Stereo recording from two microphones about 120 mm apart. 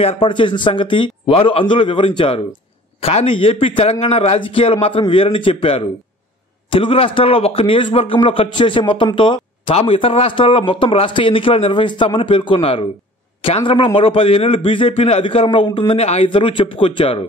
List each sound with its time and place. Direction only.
0.0 s a man's voice: 50° left (ahead or behind)
16.3 s a man's voice: 45° left (ahead or behind)